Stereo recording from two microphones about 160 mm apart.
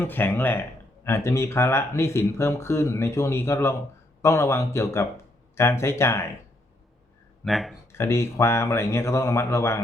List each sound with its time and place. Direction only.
0.0 s speech: 10° left (ahead or behind)
7.4 s speech: centre (ahead or behind)
7.9 s speech: 15° left (ahead or behind)